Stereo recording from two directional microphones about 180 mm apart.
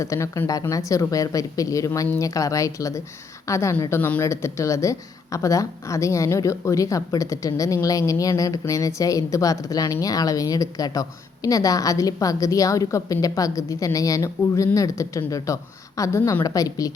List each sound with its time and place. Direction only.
0.0 s a woman's voice: 15° left (ahead or behind)